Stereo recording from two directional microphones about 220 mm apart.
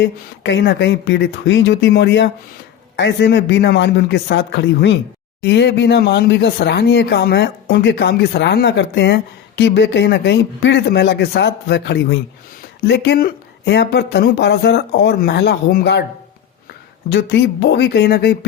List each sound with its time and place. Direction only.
0.0 s speech: 55° left (ahead or behind)
17.1 s speech: 55° left (ahead or behind)